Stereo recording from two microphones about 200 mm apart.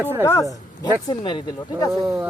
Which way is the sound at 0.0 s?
10° right (ahead or behind).